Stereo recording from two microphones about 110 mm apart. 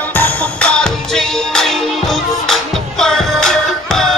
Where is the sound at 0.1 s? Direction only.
15° left (ahead or behind).